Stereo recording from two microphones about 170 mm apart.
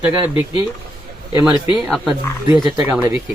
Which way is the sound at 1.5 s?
30° left (ahead or behind).